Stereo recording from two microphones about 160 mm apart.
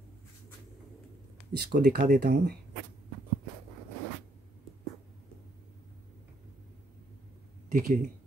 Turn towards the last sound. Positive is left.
turn(degrees=-60)  # may be behind; listen again after turning